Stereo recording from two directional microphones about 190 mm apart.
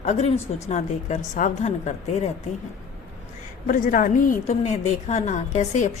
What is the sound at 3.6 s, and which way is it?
A woman's voice, 45° left (ahead or behind).